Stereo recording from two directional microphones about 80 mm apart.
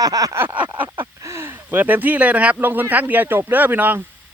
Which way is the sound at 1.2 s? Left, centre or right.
Right.